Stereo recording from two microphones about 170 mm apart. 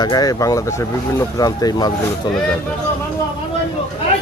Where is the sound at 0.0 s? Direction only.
20° left (ahead or behind).